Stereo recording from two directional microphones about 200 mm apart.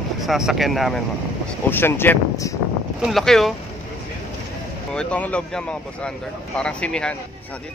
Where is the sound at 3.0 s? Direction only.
Centre (ahead or behind).